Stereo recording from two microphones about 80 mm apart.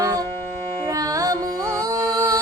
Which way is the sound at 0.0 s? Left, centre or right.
Right.